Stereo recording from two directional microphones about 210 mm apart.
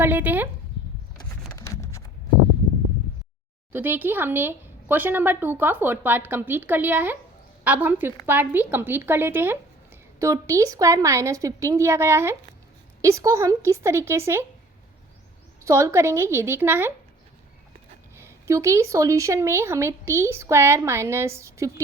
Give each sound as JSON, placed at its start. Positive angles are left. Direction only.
{"t": 0.0, "sound": "speech", "side_deg": -10}
{"t": 1.5, "sound": "a sound", "side_deg": 15}
{"t": 3.7, "sound": "speech", "side_deg": -10}
{"t": 15.6, "sound": "speech", "side_deg": -15}
{"t": 18.2, "sound": "speech", "side_deg": -15}